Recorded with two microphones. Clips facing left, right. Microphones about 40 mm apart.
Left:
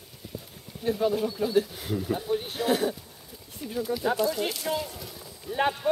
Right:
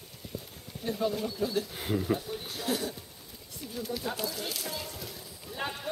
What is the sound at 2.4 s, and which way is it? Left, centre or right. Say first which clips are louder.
Speech: left 7 dB; left.